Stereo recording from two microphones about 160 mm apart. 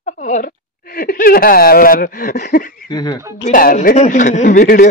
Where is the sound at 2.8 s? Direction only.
25° left (ahead or behind).